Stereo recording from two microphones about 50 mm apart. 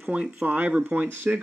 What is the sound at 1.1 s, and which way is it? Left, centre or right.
Speech, right.